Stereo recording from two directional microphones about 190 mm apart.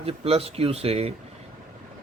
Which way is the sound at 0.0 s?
30° right (ahead or behind).